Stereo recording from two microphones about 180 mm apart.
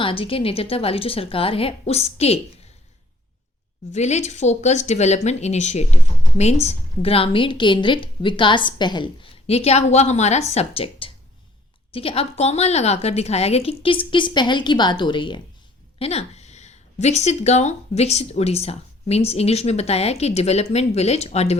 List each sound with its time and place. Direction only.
0.0 s speech: 30° left (ahead or behind)
3.9 s speech: 40° left (ahead or behind)